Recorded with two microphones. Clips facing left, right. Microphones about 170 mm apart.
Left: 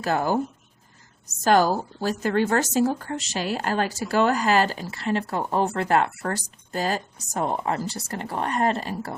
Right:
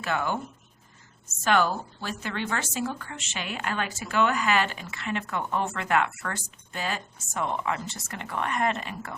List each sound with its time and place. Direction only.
0.0 s a woman's voice: 35° left (ahead or behind)